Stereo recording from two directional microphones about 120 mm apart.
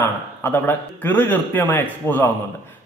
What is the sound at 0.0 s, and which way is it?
A man's voice, 15° left (ahead or behind).